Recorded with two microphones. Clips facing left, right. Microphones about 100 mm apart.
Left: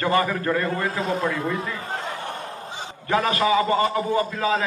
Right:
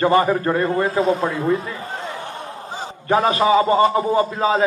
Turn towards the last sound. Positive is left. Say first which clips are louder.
# right 4 dB
turn(degrees=-30)  # may be behind; listen again after turning